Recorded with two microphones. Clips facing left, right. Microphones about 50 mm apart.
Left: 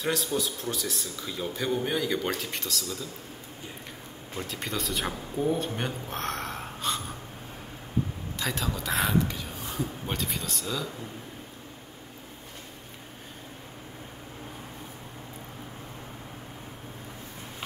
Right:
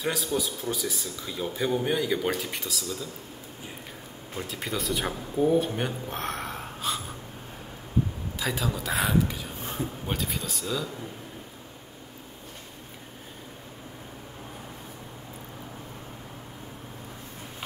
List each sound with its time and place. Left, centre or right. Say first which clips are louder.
0.0 s speech: even; centre
4.4 s speech: right 1 dB; centre
8.4 s speech: right 2 dB; centre
9.6 s a sound: even; right
10.0 s speech: right 1 dB; centre